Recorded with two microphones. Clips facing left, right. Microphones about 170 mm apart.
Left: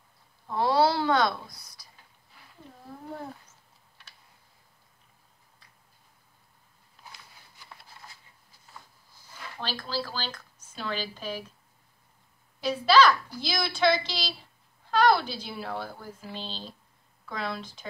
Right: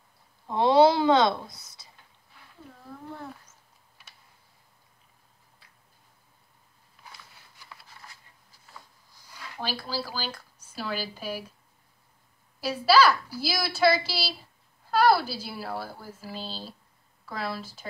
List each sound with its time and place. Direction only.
0.5 s a sound: 20° right (ahead or behind)
9.6 s speech: 10° right (ahead or behind)
12.5 s a woman's voice: 10° right (ahead or behind)